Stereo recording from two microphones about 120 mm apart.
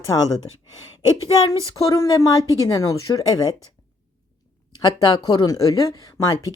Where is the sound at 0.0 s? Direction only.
30° left (ahead or behind).